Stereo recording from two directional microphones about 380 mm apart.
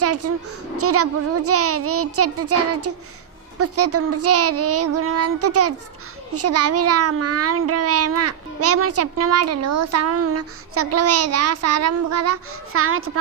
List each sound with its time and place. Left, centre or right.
0.0 s a child's voice: right